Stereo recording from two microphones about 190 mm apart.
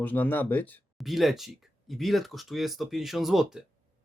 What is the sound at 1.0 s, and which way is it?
Speech, centre (ahead or behind).